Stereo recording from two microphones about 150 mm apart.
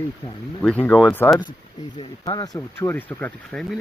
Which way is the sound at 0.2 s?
35° left (ahead or behind).